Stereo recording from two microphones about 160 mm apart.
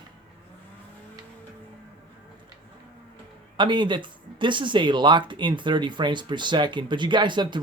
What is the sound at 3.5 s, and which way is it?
Speech, 30° right (ahead or behind).